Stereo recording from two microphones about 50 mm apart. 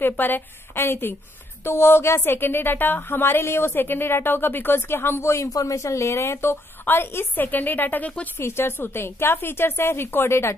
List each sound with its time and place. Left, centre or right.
0.0 s a woman's voice: left
0.7 s a woman's voice: left
1.6 s music: left
2.3 s a woman's voice: left
8.4 s a woman's voice: left